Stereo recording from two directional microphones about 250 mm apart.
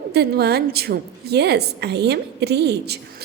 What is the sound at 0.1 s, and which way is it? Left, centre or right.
A woman's voice, right.